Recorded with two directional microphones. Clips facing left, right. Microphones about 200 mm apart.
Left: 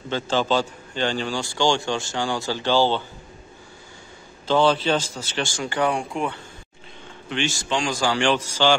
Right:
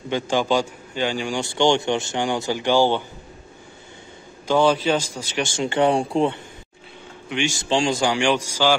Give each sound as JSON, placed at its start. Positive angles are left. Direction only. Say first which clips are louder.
{"t": 0.1, "sound": "a man's voice", "louder": "right 1 dB", "side_deg": -15}
{"t": 4.5, "sound": "a man's voice", "louder": "right 1 dB", "side_deg": -10}
{"t": 5.5, "sound": "speech", "louder": "right 5 dB", "side_deg": -25}
{"t": 7.2, "sound": "a man's voice", "louder": "right 2 dB", "side_deg": -15}
{"t": 7.6, "sound": "a man's voice", "louder": "right 5 dB", "side_deg": -30}